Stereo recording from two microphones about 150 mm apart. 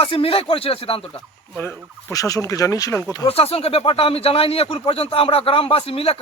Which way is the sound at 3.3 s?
40° left (ahead or behind).